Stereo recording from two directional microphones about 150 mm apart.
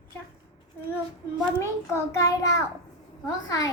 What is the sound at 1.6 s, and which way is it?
A child's voice, 20° left (ahead or behind).